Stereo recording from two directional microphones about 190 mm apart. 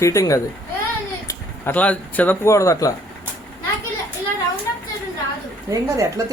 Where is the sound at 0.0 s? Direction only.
15° left (ahead or behind).